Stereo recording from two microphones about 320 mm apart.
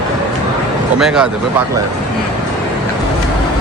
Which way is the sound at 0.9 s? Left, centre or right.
Centre.